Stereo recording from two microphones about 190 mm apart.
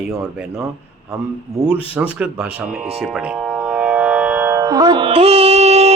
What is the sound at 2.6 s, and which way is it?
Music, 5° right (ahead or behind).